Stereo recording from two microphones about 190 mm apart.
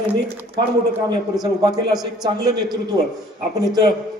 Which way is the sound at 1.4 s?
20° right (ahead or behind).